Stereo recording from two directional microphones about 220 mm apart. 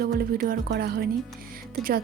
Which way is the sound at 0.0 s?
45° right (ahead or behind).